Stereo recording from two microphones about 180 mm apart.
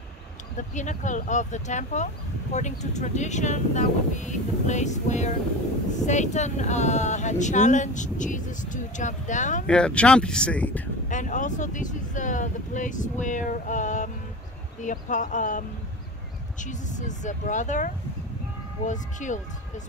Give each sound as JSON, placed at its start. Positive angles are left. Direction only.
{"t": 0.6, "sound": "speech", "side_deg": 45}
{"t": 9.7, "sound": "speech", "side_deg": 5}
{"t": 11.1, "sound": "speech", "side_deg": 45}